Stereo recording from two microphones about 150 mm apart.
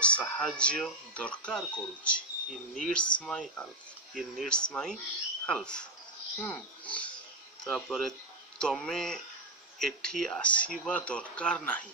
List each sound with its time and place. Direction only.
0.0 s speech: 5° left (ahead or behind)